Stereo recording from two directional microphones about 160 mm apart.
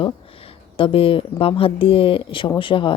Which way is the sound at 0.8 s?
35° left (ahead or behind).